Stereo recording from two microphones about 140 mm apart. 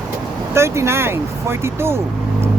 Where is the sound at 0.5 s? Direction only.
20° right (ahead or behind).